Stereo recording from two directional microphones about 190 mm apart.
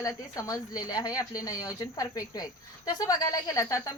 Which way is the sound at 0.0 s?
20° left (ahead or behind).